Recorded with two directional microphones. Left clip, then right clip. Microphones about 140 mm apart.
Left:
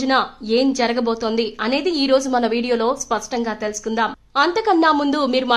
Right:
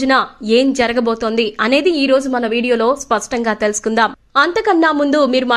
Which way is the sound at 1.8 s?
15° right (ahead or behind).